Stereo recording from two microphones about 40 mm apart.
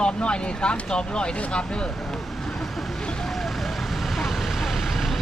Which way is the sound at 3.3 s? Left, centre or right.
Centre.